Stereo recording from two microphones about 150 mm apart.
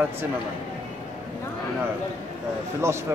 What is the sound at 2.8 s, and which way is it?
Speech, 20° right (ahead or behind).